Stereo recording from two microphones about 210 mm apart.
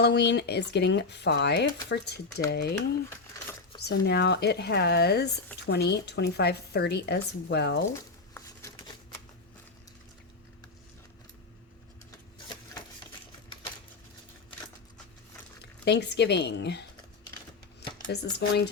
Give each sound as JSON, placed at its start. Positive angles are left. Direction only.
{"t": 0.0, "sound": "speech", "side_deg": 55}
{"t": 3.1, "sound": "a sound", "side_deg": 15}
{"t": 3.8, "sound": "speech", "side_deg": 50}
{"t": 7.9, "sound": "a sound", "side_deg": 15}
{"t": 15.8, "sound": "speech", "side_deg": 55}
{"t": 18.0, "sound": "speech", "side_deg": 50}